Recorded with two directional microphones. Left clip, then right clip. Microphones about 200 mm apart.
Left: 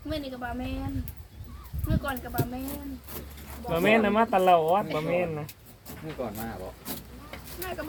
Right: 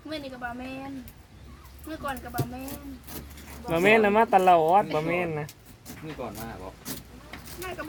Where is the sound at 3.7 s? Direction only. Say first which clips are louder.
Right 3 dB; 55° right (ahead or behind).